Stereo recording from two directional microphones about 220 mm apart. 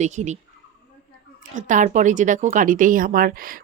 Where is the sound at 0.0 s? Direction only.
30° right (ahead or behind).